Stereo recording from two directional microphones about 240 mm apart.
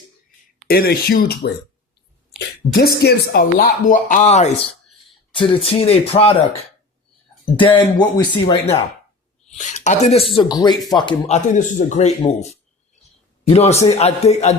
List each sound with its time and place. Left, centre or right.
0.7 s speech: left
2.7 s speech: left
7.6 s speech: left
10.3 s speech: centre